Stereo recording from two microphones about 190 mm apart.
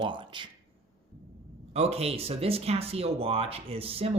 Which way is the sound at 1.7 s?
35° right (ahead or behind).